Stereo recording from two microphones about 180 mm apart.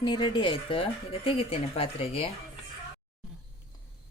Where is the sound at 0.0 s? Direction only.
25° left (ahead or behind).